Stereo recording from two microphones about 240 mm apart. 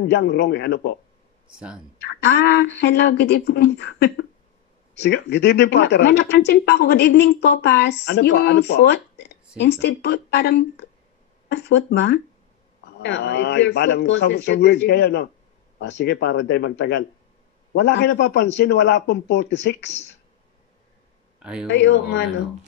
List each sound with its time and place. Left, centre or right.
0.0 s speech: left
2.2 s speech: left
21.4 s speech: centre
21.6 s speech: left